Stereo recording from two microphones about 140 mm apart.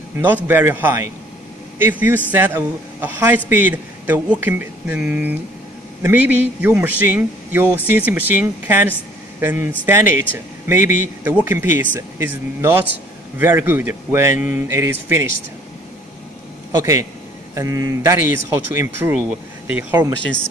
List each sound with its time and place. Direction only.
0.5 s a man's voice: 15° right (ahead or behind)
17.6 s a man's voice: 20° right (ahead or behind)